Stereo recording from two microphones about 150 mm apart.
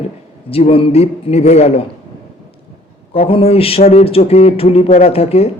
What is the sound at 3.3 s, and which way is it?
Speech, 40° left (ahead or behind).